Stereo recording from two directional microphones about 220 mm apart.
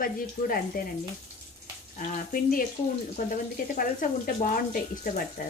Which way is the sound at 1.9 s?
40° left (ahead or behind).